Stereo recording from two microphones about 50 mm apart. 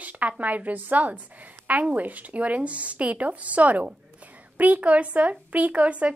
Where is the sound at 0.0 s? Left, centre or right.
Right.